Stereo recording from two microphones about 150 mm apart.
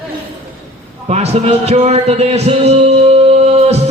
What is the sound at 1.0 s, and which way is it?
Speech, 45° right (ahead or behind).